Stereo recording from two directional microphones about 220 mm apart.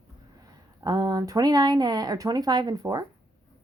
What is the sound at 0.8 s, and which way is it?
Speech, 15° right (ahead or behind).